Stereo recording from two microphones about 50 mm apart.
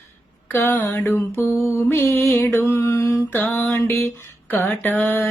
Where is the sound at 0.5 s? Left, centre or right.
Left.